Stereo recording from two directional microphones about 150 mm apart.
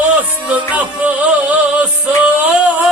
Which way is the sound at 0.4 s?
10° right (ahead or behind).